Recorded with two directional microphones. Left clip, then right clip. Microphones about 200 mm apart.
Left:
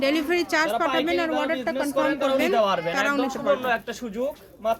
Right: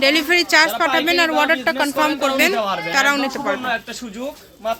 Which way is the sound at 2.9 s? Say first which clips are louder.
Right 6 dB; 5° right (ahead or behind).